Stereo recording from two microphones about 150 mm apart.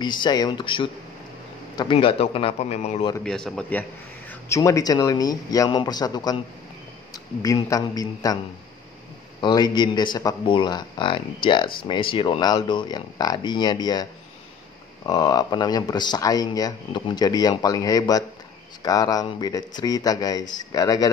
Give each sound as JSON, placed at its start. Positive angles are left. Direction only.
{"t": 0.0, "sound": "speech", "side_deg": 30}
{"t": 3.3, "sound": "a man's voice", "side_deg": 5}
{"t": 4.3, "sound": "speech", "side_deg": 20}
{"t": 7.4, "sound": "speech", "side_deg": 25}
{"t": 9.4, "sound": "speech", "side_deg": 30}
{"t": 15.0, "sound": "speech", "side_deg": 25}